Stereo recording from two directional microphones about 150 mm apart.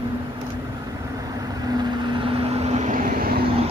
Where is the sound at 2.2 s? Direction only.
40° right (ahead or behind); by 3.4 s 80° right.